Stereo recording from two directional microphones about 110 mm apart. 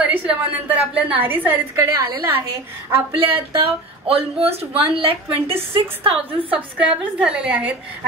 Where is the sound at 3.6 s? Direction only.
60° right (ahead or behind).